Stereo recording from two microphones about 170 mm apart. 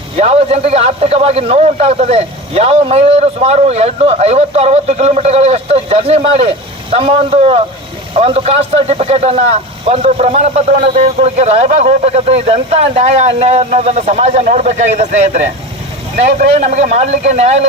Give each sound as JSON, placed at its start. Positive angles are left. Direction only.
{"t": 0.2, "sound": "speech", "side_deg": -35}